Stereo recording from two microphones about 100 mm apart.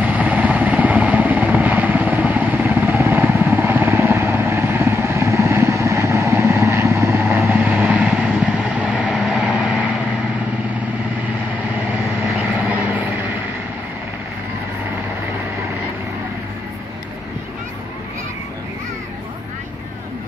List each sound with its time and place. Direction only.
0.0 s vehicle: 15° right (ahead or behind)
12.2 s vehicle: 15° right (ahead or behind)